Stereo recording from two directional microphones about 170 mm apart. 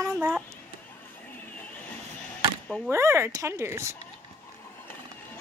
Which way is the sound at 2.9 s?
15° right (ahead or behind).